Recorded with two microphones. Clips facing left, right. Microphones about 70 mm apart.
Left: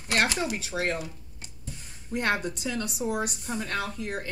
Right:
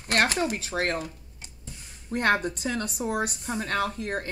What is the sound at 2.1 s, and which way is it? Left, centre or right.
A woman's voice, right.